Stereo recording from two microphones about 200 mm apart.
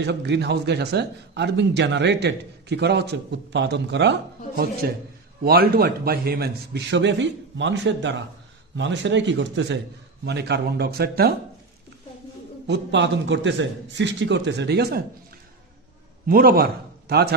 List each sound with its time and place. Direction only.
0.0 s a man's voice: 60° right (ahead or behind)
12.6 s a man's voice: 60° right (ahead or behind)
16.2 s a man's voice: 45° right (ahead or behind)